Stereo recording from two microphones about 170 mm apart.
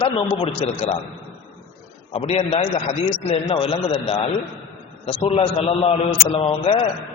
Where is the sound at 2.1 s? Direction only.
35° left (ahead or behind).